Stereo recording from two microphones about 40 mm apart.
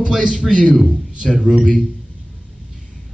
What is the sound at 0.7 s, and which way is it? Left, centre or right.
Speech, centre.